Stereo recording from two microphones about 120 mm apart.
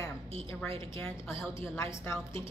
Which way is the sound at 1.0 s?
20° left (ahead or behind).